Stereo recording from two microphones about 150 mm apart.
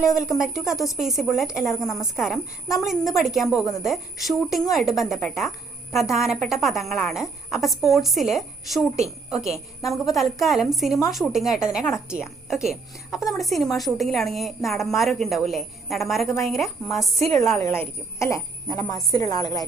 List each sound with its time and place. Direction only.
0.0 s a woman's voice: 5° right (ahead or behind)
17.6 s a woman's voice: 15° left (ahead or behind)